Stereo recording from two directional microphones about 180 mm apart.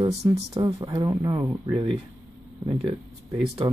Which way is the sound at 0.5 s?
20° right (ahead or behind).